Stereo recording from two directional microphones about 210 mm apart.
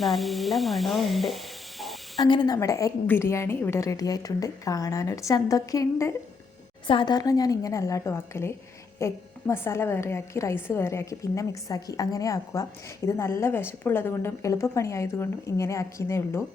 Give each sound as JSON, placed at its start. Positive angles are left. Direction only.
{"t": 0.0, "sound": "speech", "side_deg": 0}
{"t": 2.1, "sound": "a woman's voice", "side_deg": 20}